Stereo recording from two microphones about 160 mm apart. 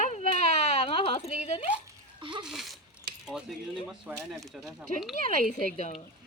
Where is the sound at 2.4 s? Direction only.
Centre (ahead or behind).